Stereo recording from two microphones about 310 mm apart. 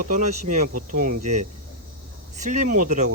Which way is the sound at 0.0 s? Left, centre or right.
Right.